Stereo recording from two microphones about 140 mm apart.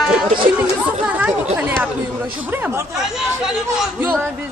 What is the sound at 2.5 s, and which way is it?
Chatter, 15° right (ahead or behind).